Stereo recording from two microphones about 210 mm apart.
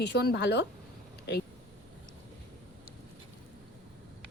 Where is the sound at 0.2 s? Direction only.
55° left (ahead or behind).